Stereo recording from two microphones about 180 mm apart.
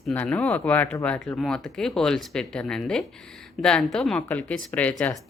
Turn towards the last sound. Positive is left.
turn(degrees=5)  # may be behind; listen again after turning